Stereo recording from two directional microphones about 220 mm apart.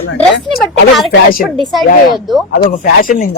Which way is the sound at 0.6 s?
Centre (ahead or behind).